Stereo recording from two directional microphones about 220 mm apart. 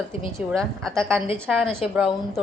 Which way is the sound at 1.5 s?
Centre (ahead or behind).